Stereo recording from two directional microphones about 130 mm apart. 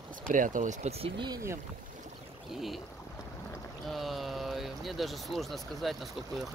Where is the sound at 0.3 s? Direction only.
90° right; by 0.9 s 70° right (ahead or behind).